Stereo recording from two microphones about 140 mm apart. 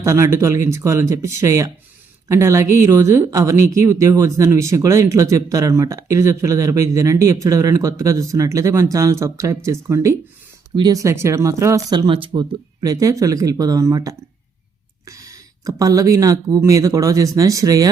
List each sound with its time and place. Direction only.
0.0 s speech: 20° right (ahead or behind)
11.9 s speech: 35° right (ahead or behind)